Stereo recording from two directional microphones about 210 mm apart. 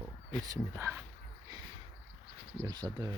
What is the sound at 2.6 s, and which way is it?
Speech, 20° right (ahead or behind).